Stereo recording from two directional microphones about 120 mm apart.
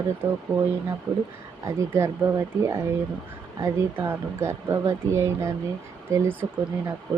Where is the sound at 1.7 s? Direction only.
25° right (ahead or behind).